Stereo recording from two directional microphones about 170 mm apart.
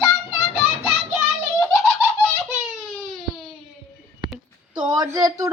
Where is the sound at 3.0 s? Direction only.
Centre (ahead or behind).